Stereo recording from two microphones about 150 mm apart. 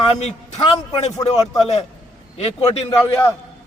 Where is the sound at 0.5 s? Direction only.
25° left (ahead or behind).